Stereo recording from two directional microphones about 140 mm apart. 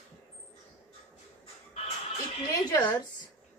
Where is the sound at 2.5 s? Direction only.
25° left (ahead or behind).